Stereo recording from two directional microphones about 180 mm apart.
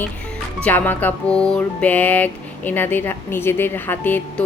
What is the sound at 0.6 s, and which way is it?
Music, 10° left (ahead or behind).